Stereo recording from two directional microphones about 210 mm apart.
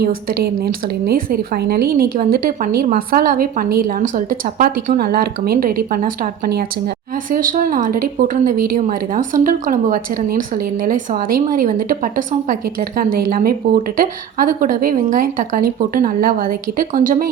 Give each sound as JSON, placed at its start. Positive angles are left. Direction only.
{"t": 0.0, "sound": "a woman's voice", "side_deg": -50}